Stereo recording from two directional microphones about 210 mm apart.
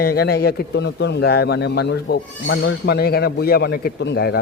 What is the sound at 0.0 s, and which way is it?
A man's voice, 50° left (ahead or behind).